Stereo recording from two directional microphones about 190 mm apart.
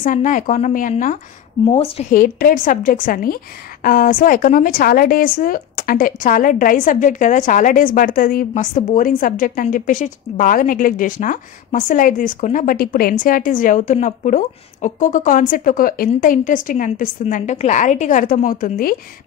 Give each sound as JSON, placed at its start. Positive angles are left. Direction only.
{"t": 0.0, "sound": "speech", "side_deg": 45}
{"t": 2.1, "sound": "speech", "side_deg": 50}